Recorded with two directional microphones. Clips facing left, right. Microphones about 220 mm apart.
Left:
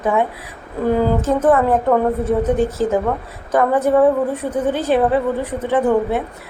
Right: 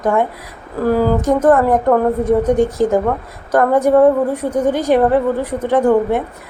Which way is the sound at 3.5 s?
Centre (ahead or behind).